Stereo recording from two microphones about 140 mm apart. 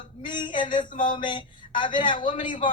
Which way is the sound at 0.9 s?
70° left (ahead or behind).